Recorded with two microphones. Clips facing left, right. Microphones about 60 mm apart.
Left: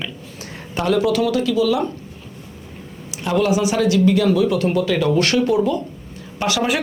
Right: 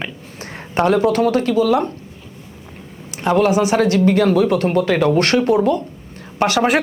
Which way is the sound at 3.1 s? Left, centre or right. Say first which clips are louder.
Right 3 dB; right.